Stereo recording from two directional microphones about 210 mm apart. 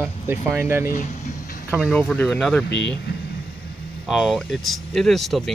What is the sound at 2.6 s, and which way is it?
Speech, 55° left (ahead or behind).